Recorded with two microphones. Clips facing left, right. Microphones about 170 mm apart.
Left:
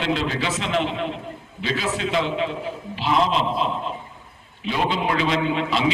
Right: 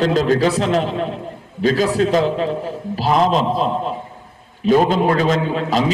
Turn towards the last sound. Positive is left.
turn(degrees=-40)  # may be behind; listen again after turning